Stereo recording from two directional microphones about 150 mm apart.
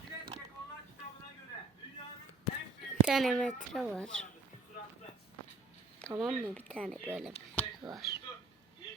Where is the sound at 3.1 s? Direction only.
Centre (ahead or behind).